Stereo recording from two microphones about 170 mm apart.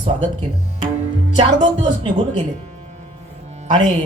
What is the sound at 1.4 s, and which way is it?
Speech, 35° right (ahead or behind).